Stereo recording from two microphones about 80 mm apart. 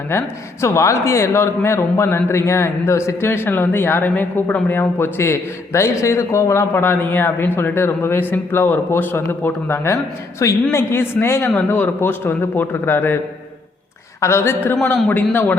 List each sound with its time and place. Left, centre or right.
0.1 s a man's voice: left
6.7 s speech: left
14.2 s a man's voice: left